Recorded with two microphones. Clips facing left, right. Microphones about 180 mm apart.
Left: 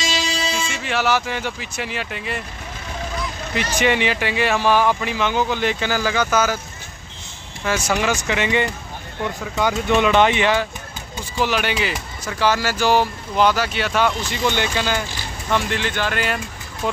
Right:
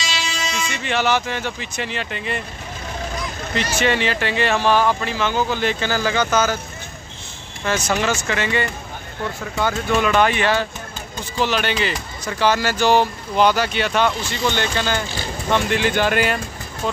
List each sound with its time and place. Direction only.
0.0 s vehicle: 40° left (ahead or behind)
0.7 s speech: 5° left (ahead or behind)
3.5 s speech: 15° left (ahead or behind)
7.6 s speech: 10° left (ahead or behind)
15.5 s speech: 5° right (ahead or behind)
15.9 s speech: 15° right (ahead or behind)
16.8 s speech: 15° left (ahead or behind)